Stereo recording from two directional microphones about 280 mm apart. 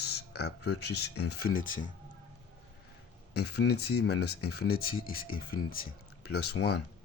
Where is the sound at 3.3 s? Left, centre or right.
Left.